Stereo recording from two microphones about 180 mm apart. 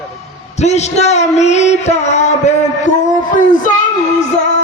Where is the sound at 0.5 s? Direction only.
40° left (ahead or behind).